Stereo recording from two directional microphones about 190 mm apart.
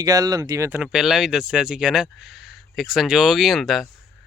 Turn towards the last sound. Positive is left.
turn(degrees=0)  # may be behind; listen again after turning